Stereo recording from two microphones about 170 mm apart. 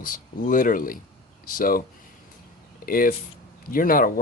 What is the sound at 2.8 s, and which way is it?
Speech, 55° left (ahead or behind).